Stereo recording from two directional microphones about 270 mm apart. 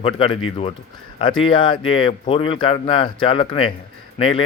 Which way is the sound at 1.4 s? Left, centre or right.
Centre.